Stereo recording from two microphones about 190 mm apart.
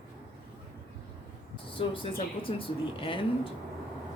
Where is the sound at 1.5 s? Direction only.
25° left (ahead or behind).